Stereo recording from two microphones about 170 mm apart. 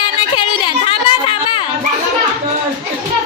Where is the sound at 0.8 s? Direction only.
30° left (ahead or behind).